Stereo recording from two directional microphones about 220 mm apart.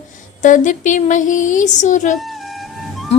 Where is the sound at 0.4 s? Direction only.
35° left (ahead or behind).